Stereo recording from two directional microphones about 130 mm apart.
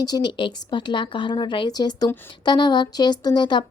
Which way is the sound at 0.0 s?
35° left (ahead or behind).